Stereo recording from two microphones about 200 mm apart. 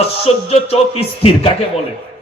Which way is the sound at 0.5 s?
30° left (ahead or behind).